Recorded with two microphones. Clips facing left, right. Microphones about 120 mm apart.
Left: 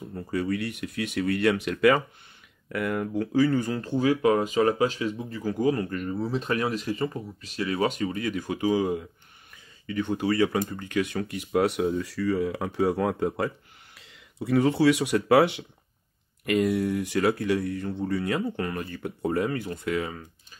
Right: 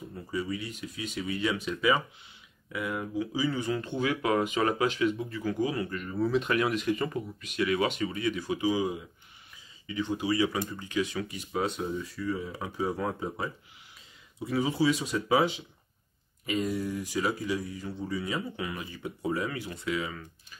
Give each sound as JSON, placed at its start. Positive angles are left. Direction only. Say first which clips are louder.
{"t": 0.1, "sound": "speech", "louder": "left 6 dB", "side_deg": 65}
{"t": 6.1, "sound": "speech", "louder": "right 3 dB", "side_deg": 30}